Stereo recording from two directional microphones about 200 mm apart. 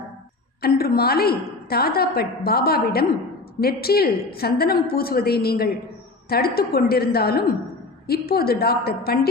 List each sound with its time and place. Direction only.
0.6 s a woman's voice: 50° left (ahead or behind)